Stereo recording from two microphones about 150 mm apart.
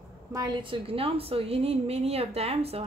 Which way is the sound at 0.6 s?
35° right (ahead or behind).